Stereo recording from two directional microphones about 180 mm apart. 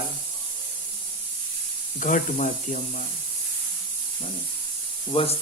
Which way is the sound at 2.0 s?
45° left (ahead or behind).